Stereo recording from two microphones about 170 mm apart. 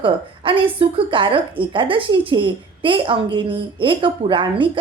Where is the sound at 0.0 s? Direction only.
30° right (ahead or behind).